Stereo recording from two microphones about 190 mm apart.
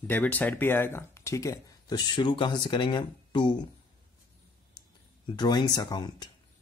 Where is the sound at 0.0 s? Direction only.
10° left (ahead or behind).